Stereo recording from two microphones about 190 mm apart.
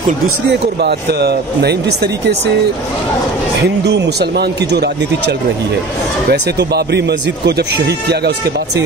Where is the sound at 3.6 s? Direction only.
60° right (ahead or behind).